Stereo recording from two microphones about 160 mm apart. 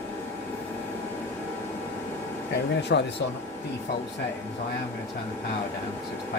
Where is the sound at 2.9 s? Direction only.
90° left.